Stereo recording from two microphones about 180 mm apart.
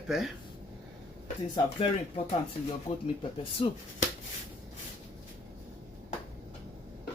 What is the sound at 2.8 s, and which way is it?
Speech, 35° left (ahead or behind).